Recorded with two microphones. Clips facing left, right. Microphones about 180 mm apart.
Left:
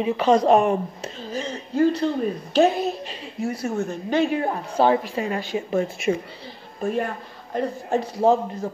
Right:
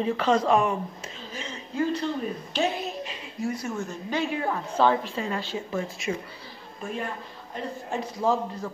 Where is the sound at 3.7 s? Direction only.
60° left (ahead or behind).